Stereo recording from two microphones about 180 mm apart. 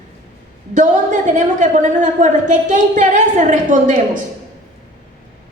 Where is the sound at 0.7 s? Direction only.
45° right (ahead or behind).